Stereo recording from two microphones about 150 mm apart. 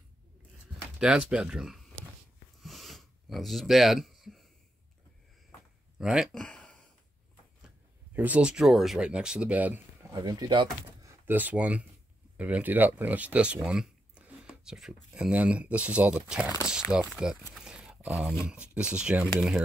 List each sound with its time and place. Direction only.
0.9 s speech: 5° right (ahead or behind)
2.6 s a sound: centre (ahead or behind)
5.9 s a sound: 5° right (ahead or behind)
8.1 s speech: 10° right (ahead or behind)
10.1 s speech: 25° right (ahead or behind)
11.2 s speech: 10° right (ahead or behind)